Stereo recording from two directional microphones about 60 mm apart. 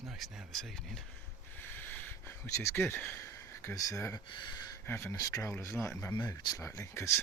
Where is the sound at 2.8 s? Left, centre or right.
Left.